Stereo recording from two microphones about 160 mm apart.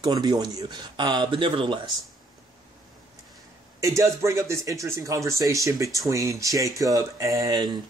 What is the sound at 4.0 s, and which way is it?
Speech, 15° right (ahead or behind).